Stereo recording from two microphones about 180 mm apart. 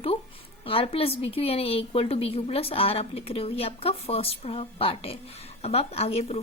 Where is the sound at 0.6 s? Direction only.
30° left (ahead or behind).